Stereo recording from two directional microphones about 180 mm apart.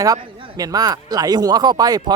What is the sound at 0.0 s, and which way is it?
Speech, 20° right (ahead or behind).